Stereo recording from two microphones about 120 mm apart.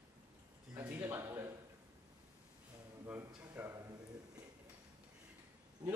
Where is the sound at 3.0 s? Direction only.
15° right (ahead or behind).